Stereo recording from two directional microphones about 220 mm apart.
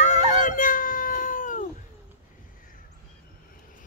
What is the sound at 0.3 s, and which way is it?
Howl, 35° left (ahead or behind).